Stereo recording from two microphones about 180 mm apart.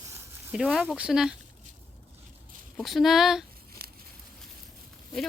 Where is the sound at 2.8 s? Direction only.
Centre (ahead or behind).